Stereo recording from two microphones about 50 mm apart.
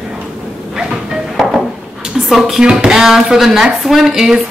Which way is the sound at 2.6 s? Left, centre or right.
Centre.